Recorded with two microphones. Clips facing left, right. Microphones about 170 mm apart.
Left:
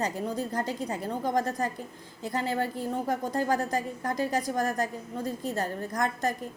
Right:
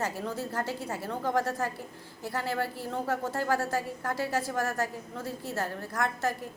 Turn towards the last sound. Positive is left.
turn(degrees=15)  # may be behind; listen again after turning